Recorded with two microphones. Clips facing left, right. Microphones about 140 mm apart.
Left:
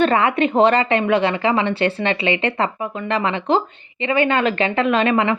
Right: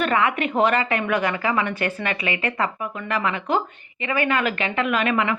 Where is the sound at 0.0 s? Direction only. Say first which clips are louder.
Left 5 dB; 35° left (ahead or behind).